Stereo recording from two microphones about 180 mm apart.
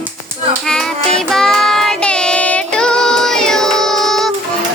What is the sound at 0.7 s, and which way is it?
Music, 5° left (ahead or behind).